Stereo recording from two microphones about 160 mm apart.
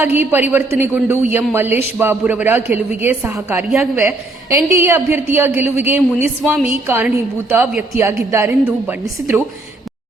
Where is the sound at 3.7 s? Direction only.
Centre (ahead or behind).